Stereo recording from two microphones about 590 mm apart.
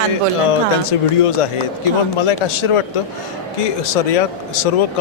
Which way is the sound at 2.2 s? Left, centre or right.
Left.